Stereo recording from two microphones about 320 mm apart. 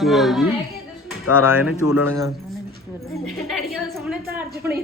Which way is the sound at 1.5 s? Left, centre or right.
Left.